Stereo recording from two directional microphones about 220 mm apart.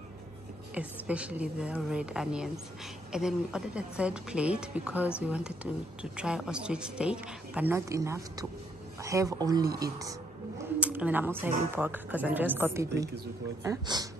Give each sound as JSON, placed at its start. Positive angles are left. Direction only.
{"t": 0.7, "sound": "a woman's voice", "side_deg": -5}
{"t": 10.8, "sound": "a woman's voice", "side_deg": -5}